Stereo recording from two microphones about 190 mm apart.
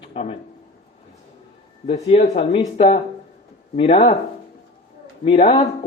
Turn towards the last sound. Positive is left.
turn(degrees=35)  # may be behind; listen again after turning